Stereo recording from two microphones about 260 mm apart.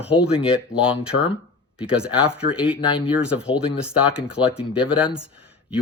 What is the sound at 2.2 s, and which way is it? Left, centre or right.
Speech, centre.